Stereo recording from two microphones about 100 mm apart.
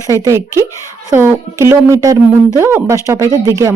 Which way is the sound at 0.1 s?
30° right (ahead or behind).